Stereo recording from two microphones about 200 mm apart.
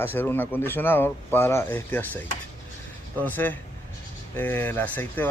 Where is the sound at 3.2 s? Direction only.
10° left (ahead or behind).